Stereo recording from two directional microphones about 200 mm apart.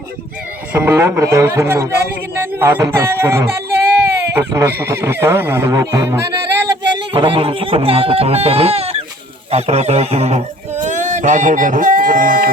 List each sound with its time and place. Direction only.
0.7 s speech: 10° right (ahead or behind)
6.7 s music: 20° right (ahead or behind)
9.5 s speech: 30° right (ahead or behind)